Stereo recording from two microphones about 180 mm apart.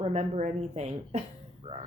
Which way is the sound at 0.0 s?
40° right (ahead or behind).